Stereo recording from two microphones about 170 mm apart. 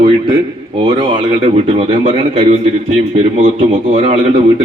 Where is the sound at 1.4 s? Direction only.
45° right (ahead or behind).